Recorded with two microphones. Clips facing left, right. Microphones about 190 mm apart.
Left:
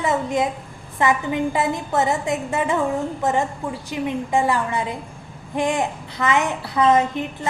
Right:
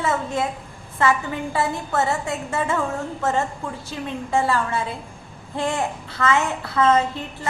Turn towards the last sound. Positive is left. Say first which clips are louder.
# left 1 dB
turn(degrees=15)  # may be behind; listen again after turning